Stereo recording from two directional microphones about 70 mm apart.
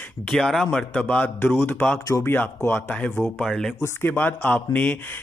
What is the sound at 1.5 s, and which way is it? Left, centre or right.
Speech, left.